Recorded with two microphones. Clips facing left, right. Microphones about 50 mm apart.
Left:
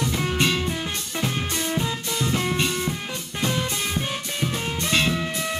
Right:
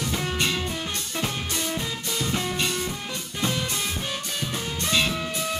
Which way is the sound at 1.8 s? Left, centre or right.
Left.